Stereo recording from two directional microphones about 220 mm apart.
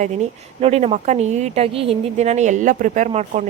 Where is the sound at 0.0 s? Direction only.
30° right (ahead or behind).